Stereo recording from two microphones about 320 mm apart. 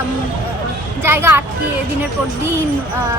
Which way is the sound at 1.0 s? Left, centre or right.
Centre.